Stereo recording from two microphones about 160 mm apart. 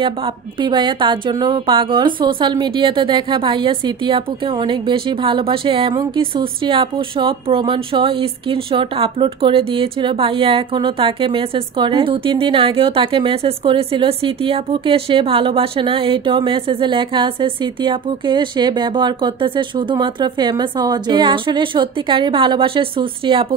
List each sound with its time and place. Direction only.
0.0 s a woman's voice: 30° right (ahead or behind)